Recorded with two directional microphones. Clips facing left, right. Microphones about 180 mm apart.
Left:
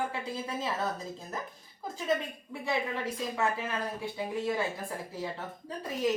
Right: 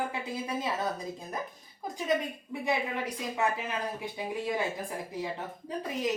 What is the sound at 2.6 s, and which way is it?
A woman's voice, 15° right (ahead or behind).